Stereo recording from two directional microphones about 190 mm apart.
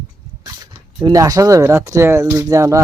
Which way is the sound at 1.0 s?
20° right (ahead or behind).